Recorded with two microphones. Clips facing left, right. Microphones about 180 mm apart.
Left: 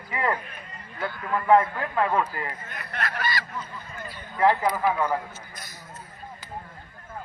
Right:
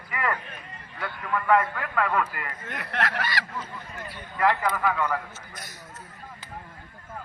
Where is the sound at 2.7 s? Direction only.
90° right.